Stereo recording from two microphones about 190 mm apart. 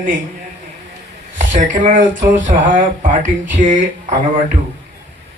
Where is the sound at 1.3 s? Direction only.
40° right (ahead or behind).